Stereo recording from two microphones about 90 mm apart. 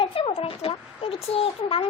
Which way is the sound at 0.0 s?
90° left.